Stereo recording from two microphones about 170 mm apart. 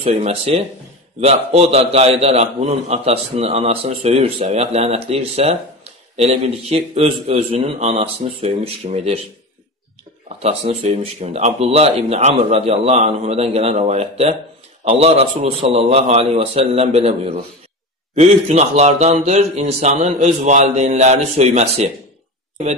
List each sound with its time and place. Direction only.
0.0 s a man's voice: 35° right (ahead or behind)
10.2 s a man's voice: 40° right (ahead or behind)